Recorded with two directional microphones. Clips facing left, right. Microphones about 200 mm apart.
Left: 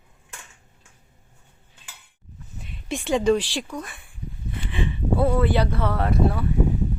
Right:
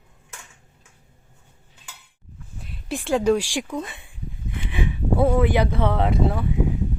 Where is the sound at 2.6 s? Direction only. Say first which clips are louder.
Even; centre (ahead or behind).